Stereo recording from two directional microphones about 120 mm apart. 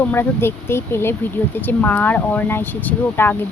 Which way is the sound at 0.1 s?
20° left (ahead or behind).